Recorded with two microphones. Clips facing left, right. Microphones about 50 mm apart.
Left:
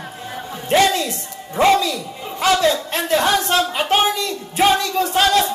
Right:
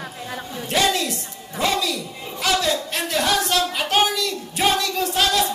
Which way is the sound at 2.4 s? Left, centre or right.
Left.